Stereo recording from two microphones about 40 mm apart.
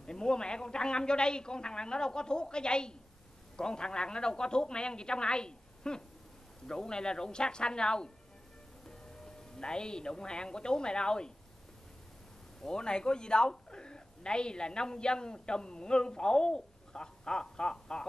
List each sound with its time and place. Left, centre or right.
0.0 s a woman's voice: left
12.6 s a woman's voice: left